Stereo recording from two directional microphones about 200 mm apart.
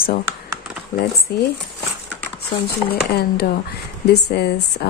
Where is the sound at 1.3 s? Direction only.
50° left (ahead or behind).